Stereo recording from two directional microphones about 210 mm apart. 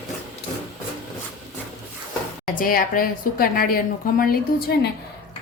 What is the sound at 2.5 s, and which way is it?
A woman's voice, 45° left (ahead or behind).